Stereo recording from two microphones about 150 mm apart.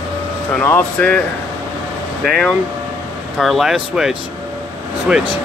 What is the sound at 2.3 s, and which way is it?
Speech, centre (ahead or behind).